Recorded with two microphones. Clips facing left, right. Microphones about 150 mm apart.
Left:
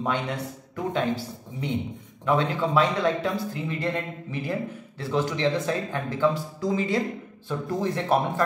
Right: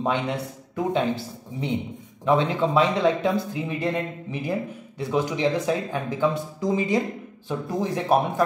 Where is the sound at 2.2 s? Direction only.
20° right (ahead or behind).